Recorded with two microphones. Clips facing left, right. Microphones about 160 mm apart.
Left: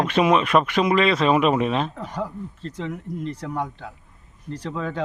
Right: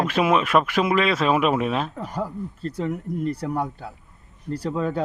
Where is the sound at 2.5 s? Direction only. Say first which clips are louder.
Right 5 dB; 40° right (ahead or behind).